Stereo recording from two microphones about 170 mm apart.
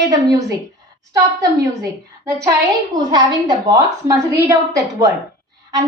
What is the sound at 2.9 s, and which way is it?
A woman's voice, 25° right (ahead or behind).